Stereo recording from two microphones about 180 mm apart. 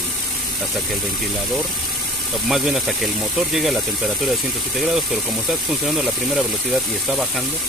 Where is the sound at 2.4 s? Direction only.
Centre (ahead or behind).